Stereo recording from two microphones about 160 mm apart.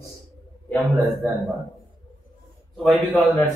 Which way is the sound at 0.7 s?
Centre (ahead or behind).